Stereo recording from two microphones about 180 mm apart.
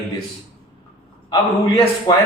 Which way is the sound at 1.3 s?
20° left (ahead or behind).